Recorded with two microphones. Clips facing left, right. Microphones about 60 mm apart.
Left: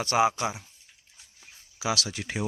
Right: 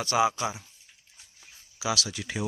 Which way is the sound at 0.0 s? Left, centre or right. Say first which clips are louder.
Left 1 dB; left.